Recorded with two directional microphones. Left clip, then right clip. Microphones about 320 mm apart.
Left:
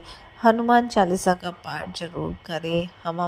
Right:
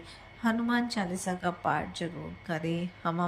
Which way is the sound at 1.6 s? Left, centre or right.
Centre.